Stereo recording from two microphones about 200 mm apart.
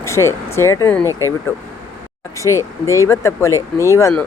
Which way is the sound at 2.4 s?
15° left (ahead or behind).